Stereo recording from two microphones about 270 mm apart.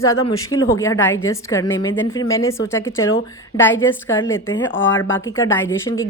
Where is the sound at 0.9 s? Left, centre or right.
Left.